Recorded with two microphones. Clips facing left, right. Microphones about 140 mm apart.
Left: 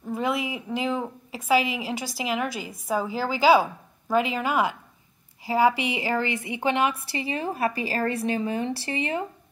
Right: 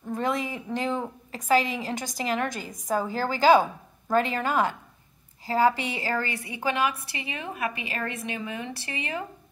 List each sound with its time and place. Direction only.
0.0 s a woman's voice: 10° left (ahead or behind); by 9.2 s 30° left (ahead or behind)